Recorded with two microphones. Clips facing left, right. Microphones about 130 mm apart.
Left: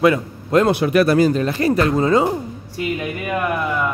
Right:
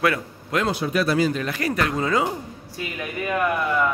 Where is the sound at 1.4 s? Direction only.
30° left (ahead or behind).